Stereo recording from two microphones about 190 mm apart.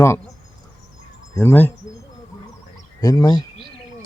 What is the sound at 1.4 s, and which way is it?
Speech, 10° left (ahead or behind).